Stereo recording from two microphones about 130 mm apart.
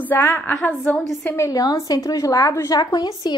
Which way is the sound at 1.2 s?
20° left (ahead or behind).